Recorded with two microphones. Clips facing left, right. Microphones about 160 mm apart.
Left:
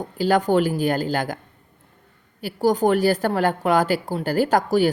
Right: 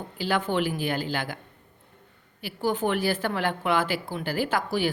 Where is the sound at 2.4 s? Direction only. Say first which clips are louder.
Left 7 dB; 40° left (ahead or behind).